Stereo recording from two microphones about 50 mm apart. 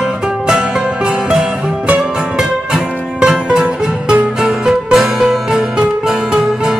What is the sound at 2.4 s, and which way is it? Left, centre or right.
Music, centre.